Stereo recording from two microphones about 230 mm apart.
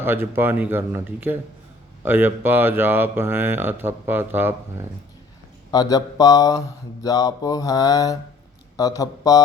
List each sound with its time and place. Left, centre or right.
0.0 s speech: centre
5.7 s speech: centre